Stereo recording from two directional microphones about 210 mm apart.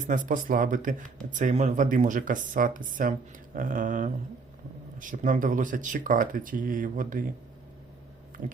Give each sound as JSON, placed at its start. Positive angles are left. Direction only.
{"t": 0.1, "sound": "speech", "side_deg": -40}